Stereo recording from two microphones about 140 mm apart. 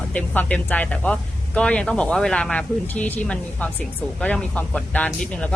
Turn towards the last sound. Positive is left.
turn(degrees=10)  # may be behind; listen again after turning